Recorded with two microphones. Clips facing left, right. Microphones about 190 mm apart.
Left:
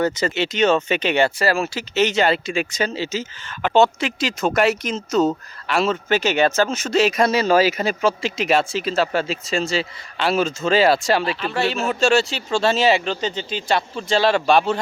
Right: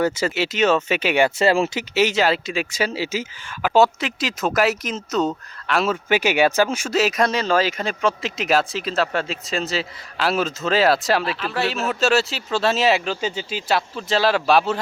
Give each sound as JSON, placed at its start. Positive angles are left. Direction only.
{"t": 0.0, "sound": "speech", "side_deg": -5}
{"t": 1.4, "sound": "speech", "side_deg": -25}
{"t": 2.0, "sound": "speech", "side_deg": -5}
{"t": 6.1, "sound": "speech", "side_deg": -10}